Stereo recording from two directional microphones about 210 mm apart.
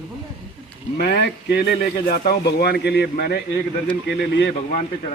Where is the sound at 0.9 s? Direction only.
55° left (ahead or behind).